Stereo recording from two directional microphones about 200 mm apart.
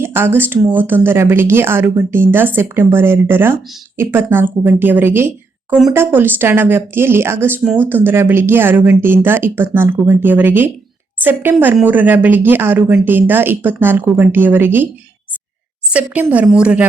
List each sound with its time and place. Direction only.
0.0 s a woman's voice: 10° right (ahead or behind)
15.9 s a woman's voice: 5° right (ahead or behind)